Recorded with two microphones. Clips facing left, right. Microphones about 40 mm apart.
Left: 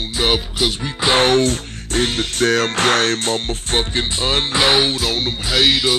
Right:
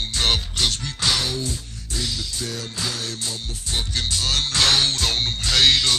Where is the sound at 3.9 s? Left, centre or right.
Left.